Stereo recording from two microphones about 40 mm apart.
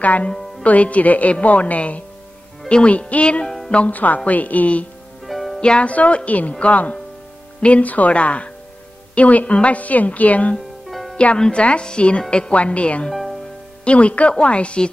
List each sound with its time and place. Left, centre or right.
0.0 s a woman's voice: left
3.4 s music: centre
3.7 s a woman's voice: left
5.2 s music: centre
5.6 s a woman's voice: left
10.9 s music: centre
11.5 s speech: left
13.1 s music: centre
13.8 s a woman's voice: left